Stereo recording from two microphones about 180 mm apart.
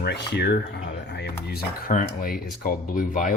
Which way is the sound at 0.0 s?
70° left (ahead or behind).